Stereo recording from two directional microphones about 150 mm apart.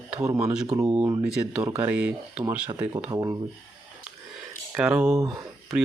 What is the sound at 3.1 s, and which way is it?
Speech, 20° right (ahead or behind).